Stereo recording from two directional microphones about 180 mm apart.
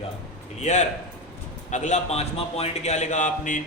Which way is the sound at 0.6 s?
40° left (ahead or behind).